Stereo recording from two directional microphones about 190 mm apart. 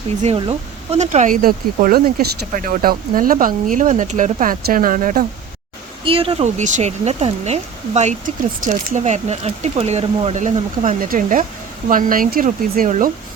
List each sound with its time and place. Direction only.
0.2 s speech: 30° right (ahead or behind)
6.1 s speech: 30° right (ahead or behind); by 13.1 s 45° right (ahead or behind)